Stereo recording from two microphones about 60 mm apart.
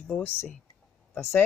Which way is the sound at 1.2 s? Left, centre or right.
Left.